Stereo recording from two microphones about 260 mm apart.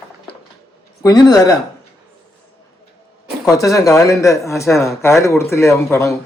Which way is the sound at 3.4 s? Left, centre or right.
Centre.